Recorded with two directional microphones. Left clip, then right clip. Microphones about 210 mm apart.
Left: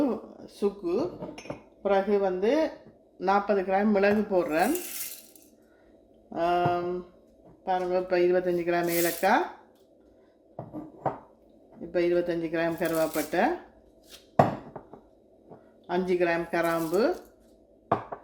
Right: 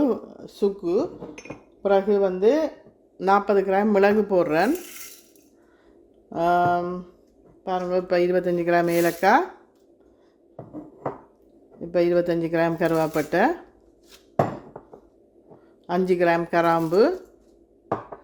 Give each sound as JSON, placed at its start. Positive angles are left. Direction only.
{"t": 0.0, "sound": "a sound", "side_deg": -50}
{"t": 1.8, "sound": "speech", "side_deg": -50}
{"t": 6.3, "sound": "speech", "side_deg": -50}
{"t": 11.9, "sound": "speech", "side_deg": -50}
{"t": 15.9, "sound": "speech", "side_deg": -50}